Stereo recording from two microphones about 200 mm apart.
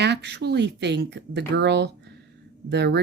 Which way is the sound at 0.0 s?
55° right (ahead or behind).